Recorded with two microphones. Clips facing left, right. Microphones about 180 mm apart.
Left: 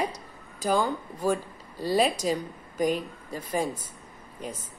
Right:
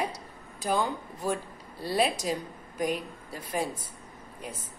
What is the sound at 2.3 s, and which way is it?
Speech, 5° right (ahead or behind).